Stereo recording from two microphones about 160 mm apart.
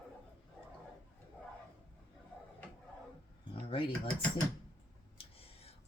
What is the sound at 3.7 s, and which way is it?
Speech, 35° left (ahead or behind).